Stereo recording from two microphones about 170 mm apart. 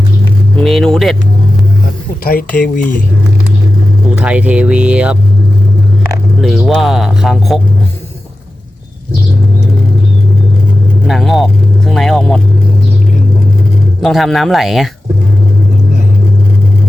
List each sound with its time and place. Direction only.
0.5 s vehicle: centre (ahead or behind)
2.2 s speech: 55° left (ahead or behind)
4.1 s speech: 5° right (ahead or behind)
6.4 s speech: centre (ahead or behind)
11.0 s speech: centre (ahead or behind)
14.0 s speech: centre (ahead or behind)